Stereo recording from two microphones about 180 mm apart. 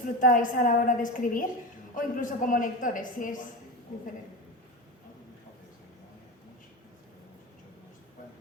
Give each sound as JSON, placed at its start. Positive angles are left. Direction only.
{"t": 0.0, "sound": "a woman's voice", "side_deg": 50}